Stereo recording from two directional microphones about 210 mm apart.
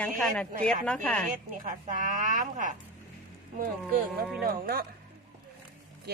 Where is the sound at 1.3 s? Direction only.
40° right (ahead or behind).